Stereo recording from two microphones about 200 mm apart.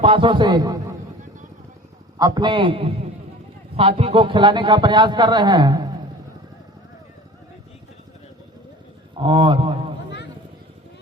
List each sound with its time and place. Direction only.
0.0 s speech: 25° right (ahead or behind)
2.1 s speech: 20° right (ahead or behind)
9.1 s speech: 25° right (ahead or behind)